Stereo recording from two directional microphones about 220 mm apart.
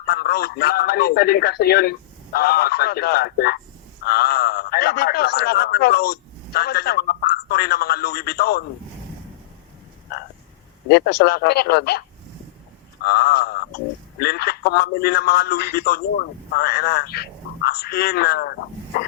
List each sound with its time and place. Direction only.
0.0 s speech: 45° left (ahead or behind)
10.8 s speech: 45° left (ahead or behind)